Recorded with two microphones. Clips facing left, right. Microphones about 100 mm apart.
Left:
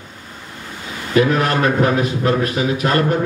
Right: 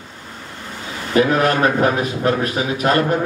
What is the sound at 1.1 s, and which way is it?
A man's voice, 35° right (ahead or behind).